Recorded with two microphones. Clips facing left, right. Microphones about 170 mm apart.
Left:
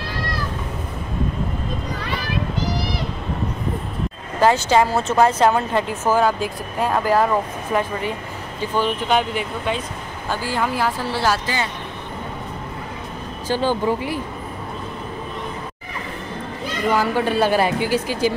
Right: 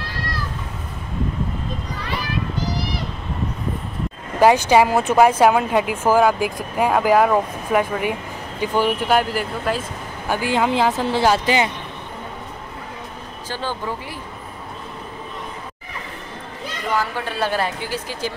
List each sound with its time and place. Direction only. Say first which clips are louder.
4.4 s speech: right 2 dB; 15° right (ahead or behind)
10.2 s a woman's voice: right 3 dB; 15° right (ahead or behind)
13.5 s speech: left 7 dB; 15° left (ahead or behind)
16.9 s speech: left 4 dB; 10° left (ahead or behind)